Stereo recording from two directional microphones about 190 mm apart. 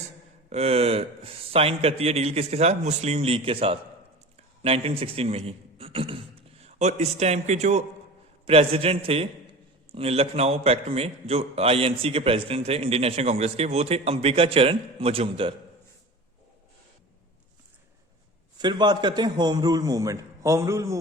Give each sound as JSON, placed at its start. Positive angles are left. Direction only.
{"t": 0.5, "sound": "a man's voice", "side_deg": -35}
{"t": 18.6, "sound": "a man's voice", "side_deg": -25}